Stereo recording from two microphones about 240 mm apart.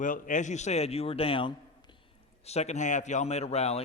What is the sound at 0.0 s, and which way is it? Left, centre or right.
A man's voice, left.